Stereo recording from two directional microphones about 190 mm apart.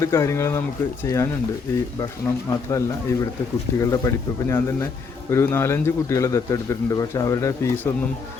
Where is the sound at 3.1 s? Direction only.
15° left (ahead or behind).